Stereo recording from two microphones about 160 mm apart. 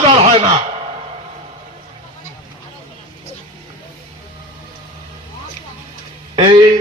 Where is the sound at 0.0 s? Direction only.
35° right (ahead or behind).